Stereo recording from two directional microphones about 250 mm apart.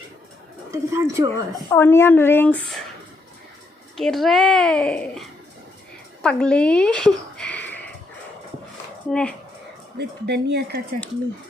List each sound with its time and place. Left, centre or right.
0.7 s a woman's voice: centre
1.3 s a woman's voice: centre
3.9 s a woman's voice: centre
9.0 s a woman's voice: centre
10.0 s speech: right